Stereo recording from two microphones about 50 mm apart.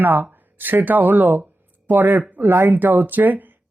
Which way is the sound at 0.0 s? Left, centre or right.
Right.